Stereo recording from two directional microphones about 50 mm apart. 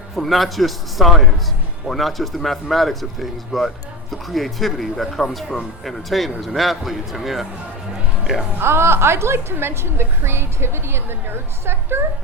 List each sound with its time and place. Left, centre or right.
0.2 s speech: centre
8.6 s a woman's voice: right